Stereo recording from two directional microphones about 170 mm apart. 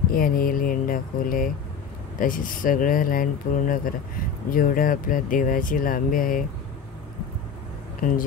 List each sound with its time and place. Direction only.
0.1 s speech: 55° left (ahead or behind)